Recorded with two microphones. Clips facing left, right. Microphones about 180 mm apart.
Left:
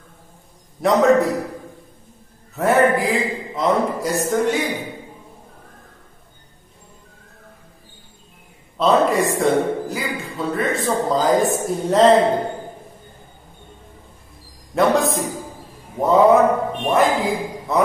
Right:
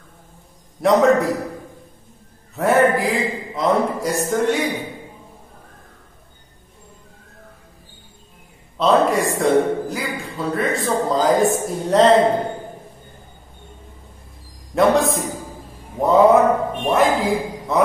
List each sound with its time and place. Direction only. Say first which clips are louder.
0.7 s a man's voice: even; centre (ahead or behind)
2.5 s mantra: even; centre (ahead or behind)
3.0 s a man's voice: even; centre (ahead or behind)
8.7 s a man's voice: even; centre (ahead or behind)
14.8 s a man's voice: right 1 dB; centre (ahead or behind)